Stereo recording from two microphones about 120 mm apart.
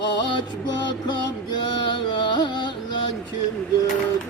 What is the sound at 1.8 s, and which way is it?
Music, 40° left (ahead or behind).